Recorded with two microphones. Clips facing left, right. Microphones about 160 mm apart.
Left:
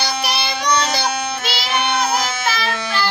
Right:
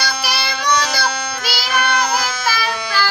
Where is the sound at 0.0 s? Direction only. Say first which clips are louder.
Left 1 dB; 20° left (ahead or behind).